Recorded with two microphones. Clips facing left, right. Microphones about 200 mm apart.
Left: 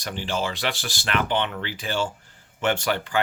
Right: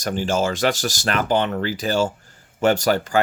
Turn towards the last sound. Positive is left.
turn(degrees=-40)  # may be behind; listen again after turning